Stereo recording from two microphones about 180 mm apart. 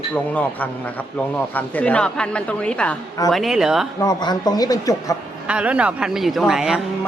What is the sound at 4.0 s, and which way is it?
Speech, 20° left (ahead or behind).